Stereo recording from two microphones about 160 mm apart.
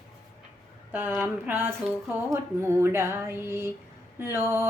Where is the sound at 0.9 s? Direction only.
10° right (ahead or behind).